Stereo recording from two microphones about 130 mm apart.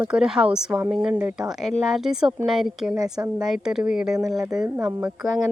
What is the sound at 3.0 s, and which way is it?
Speech, 30° right (ahead or behind).